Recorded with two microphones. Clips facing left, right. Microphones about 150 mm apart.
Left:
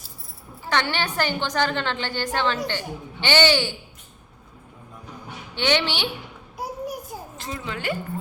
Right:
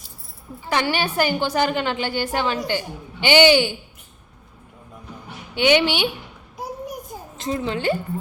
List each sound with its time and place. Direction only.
0.7 s a woman's voice: 10° right (ahead or behind)
5.5 s a woman's voice: 15° right (ahead or behind)
7.1 s a sound: 5° left (ahead or behind)
7.5 s speech: 30° right (ahead or behind)